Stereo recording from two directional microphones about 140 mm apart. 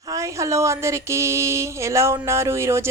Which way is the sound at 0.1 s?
20° right (ahead or behind).